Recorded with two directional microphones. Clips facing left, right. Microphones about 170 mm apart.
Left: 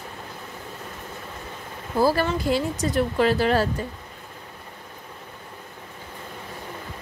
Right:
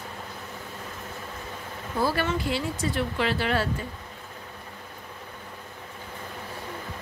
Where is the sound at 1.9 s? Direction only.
35° left (ahead or behind).